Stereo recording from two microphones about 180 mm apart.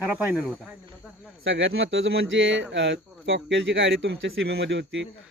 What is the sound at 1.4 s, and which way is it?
Speech, 90° right.